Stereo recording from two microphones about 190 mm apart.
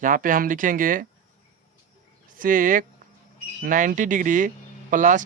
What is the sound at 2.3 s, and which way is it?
Speech, 45° right (ahead or behind).